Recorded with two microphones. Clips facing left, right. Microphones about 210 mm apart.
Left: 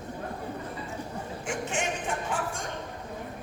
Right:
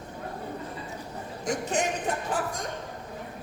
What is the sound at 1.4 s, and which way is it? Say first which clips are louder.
Music: right 5 dB; 40° right (ahead or behind).